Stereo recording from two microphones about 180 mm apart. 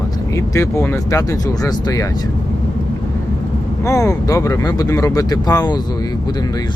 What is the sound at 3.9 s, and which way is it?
Speech, 15° left (ahead or behind).